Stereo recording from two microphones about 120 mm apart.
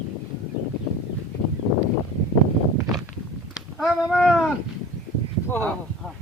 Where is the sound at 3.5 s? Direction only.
5° right (ahead or behind).